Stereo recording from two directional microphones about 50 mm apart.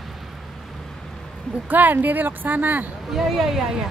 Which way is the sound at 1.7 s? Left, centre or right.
Right.